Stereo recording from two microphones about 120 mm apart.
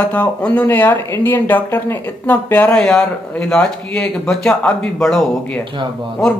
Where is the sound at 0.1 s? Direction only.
10° left (ahead or behind).